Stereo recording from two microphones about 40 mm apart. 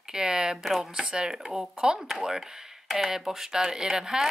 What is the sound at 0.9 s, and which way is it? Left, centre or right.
Speech, right.